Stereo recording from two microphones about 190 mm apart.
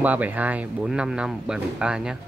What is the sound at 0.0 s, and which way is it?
Speech, 10° right (ahead or behind).